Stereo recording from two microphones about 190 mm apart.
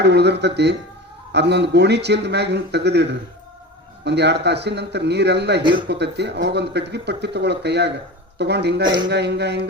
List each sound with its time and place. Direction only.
0.0 s speech: 60° right (ahead or behind)